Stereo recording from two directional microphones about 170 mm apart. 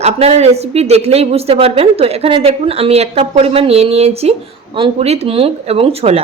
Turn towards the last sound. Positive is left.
turn(degrees=-35)  # may be behind; listen again after turning